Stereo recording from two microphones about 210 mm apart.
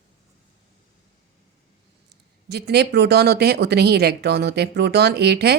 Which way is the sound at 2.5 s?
50° right (ahead or behind).